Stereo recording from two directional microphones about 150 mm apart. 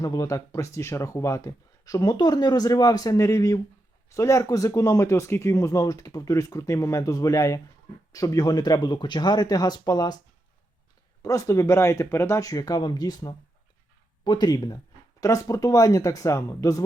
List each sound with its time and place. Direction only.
0.0 s speech: 25° left (ahead or behind)
11.2 s speech: 20° left (ahead or behind)